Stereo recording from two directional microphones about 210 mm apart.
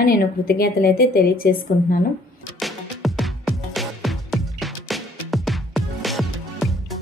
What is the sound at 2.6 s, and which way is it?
Music, centre (ahead or behind).